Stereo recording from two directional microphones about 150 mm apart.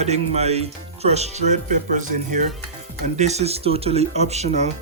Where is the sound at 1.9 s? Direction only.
55° right (ahead or behind).